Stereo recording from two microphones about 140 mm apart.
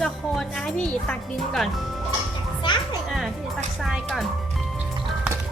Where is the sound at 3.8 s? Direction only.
Centre (ahead or behind).